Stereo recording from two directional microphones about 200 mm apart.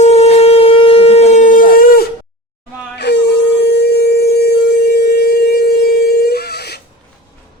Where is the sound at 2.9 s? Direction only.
55° left (ahead or behind).